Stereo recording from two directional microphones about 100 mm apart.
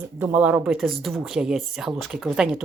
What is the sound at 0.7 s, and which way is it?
Speech, centre (ahead or behind).